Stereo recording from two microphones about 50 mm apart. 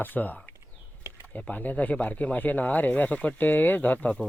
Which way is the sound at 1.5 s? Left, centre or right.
Left.